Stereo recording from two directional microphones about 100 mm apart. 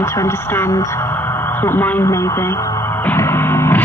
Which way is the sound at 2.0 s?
30° left (ahead or behind).